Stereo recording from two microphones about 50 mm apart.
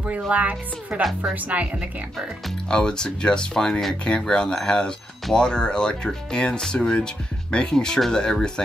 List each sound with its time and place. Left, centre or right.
0.3 s speech: right
2.7 s speech: centre